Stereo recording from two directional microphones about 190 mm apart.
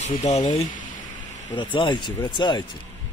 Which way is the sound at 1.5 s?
25° left (ahead or behind).